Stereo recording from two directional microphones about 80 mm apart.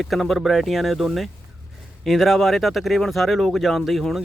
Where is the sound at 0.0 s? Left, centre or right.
Centre.